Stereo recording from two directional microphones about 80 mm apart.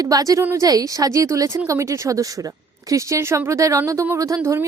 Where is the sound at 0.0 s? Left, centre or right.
Right.